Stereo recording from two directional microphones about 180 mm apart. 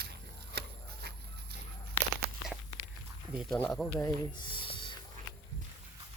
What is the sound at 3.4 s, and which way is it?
Speech, 5° left (ahead or behind).